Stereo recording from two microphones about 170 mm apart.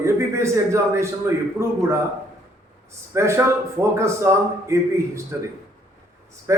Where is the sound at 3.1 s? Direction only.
15° right (ahead or behind).